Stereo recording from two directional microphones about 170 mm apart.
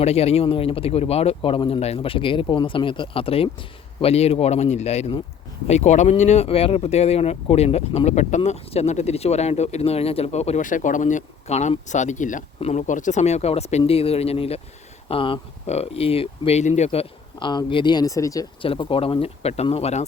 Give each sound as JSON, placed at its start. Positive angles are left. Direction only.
{"t": 0.0, "sound": "speech", "side_deg": 40}
{"t": 18.6, "sound": "speech", "side_deg": 30}